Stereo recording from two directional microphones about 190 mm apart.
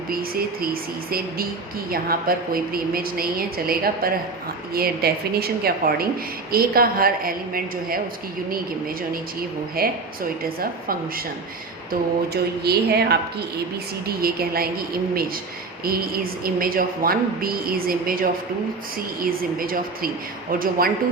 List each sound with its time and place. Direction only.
0.1 s a woman's voice: 50° right (ahead or behind)